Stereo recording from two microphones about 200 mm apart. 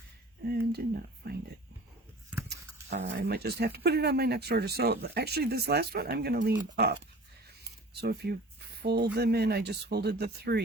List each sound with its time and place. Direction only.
0.4 s a sound: 50° right (ahead or behind)
1.2 s speech: 50° right (ahead or behind)
2.5 s speech: 55° right (ahead or behind)
8.0 s speech: 55° right (ahead or behind)